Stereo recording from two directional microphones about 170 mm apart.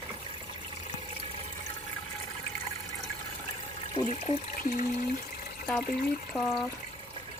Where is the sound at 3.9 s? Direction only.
40° left (ahead or behind).